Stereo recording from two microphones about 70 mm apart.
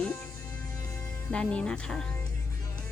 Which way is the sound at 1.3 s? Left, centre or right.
Centre.